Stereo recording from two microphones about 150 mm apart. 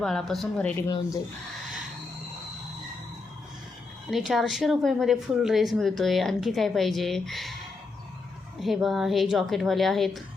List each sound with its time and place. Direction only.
0.0 s speech: 5° left (ahead or behind)
0.9 s speech: 25° left (ahead or behind)
4.1 s speech: centre (ahead or behind)
8.5 s speech: centre (ahead or behind)